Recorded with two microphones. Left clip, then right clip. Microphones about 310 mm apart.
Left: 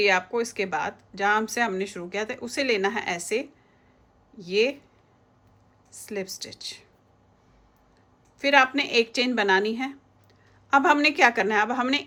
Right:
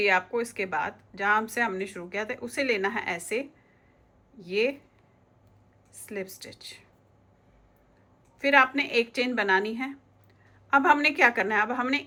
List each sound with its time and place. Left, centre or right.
0.0 s speech: centre
5.9 s speech: centre
8.4 s speech: centre